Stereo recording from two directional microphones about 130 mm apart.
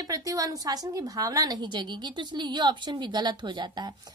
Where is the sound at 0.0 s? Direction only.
25° right (ahead or behind).